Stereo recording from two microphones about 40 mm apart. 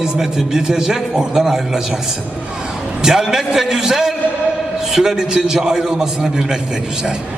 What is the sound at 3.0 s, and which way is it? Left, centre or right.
A man's voice, centre.